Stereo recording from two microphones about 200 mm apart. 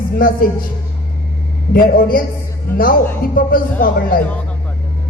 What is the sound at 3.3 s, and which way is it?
Speech, 45° left (ahead or behind).